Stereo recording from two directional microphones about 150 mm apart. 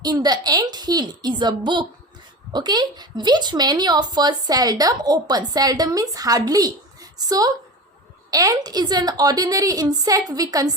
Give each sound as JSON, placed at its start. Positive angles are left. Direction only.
{"t": 0.0, "sound": "speech", "side_deg": -25}